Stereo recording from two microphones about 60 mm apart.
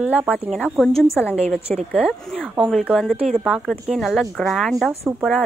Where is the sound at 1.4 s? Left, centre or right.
Left.